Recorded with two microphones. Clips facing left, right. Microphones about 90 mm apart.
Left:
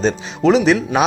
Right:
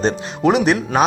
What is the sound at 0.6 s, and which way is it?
Speech, 10° right (ahead or behind).